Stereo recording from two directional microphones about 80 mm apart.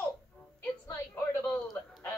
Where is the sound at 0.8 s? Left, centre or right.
Left.